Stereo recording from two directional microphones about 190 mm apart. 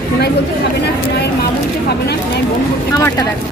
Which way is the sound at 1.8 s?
60° left (ahead or behind).